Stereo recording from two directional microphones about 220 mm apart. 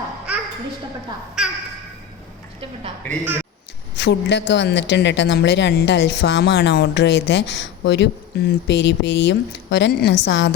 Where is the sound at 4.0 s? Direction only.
50° left (ahead or behind).